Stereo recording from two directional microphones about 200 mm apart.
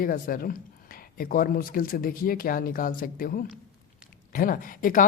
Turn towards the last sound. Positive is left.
turn(degrees=45)  # may be behind; listen again after turning